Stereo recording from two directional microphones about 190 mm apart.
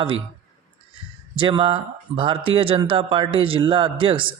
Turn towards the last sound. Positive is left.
turn(degrees=-25)  # may be behind; listen again after turning